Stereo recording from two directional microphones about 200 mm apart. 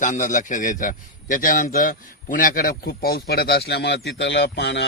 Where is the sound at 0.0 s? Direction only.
40° left (ahead or behind).